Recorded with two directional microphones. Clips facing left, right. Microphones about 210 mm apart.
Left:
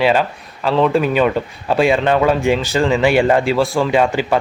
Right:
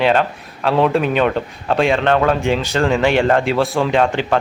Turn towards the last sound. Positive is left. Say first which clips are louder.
# left 1 dB
turn(degrees=5)  # may be behind; listen again after turning